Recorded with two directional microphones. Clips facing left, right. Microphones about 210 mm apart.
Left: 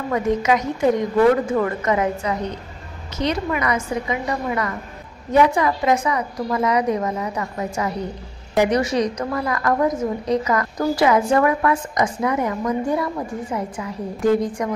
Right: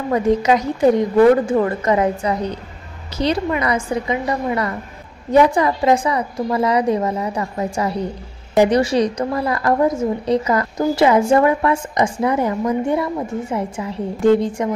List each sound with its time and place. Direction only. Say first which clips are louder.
0.1 s a woman's voice: right 4 dB; 30° right (ahead or behind)